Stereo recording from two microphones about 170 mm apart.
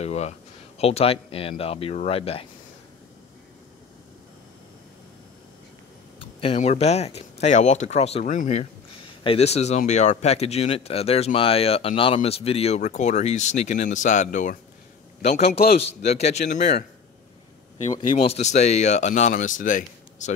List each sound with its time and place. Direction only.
0.0 s a sound: 40° left (ahead or behind)
0.7 s speech: 35° left (ahead or behind)
6.1 s speech: 35° left (ahead or behind)
18.1 s speech: 40° left (ahead or behind)